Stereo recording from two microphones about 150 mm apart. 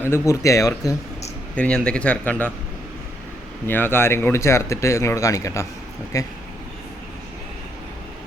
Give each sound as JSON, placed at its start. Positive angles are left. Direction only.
{"t": 0.0, "sound": "speech", "side_deg": 20}
{"t": 1.5, "sound": "speech", "side_deg": 5}
{"t": 3.7, "sound": "speech", "side_deg": 15}